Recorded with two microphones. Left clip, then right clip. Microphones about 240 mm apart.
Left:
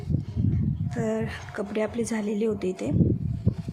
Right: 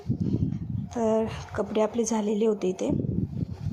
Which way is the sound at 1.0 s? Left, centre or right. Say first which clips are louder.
Right 4 dB; centre.